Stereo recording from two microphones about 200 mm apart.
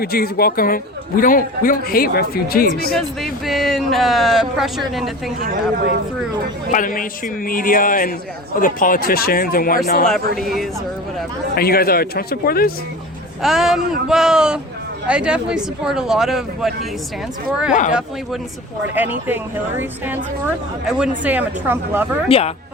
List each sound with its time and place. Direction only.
0.0 s a man's voice: 50° left (ahead or behind)
3.4 s speech: centre (ahead or behind)
5.4 s speech: 50° right (ahead or behind)
6.7 s a man's voice: 40° left (ahead or behind)
10.3 s speech: centre (ahead or behind)
11.5 s a man's voice: 50° left (ahead or behind)
13.4 s speech: centre (ahead or behind)
18.9 s a woman's voice: 10° right (ahead or behind)
21.2 s a woman's voice: 10° right (ahead or behind)
22.3 s speech: 30° left (ahead or behind)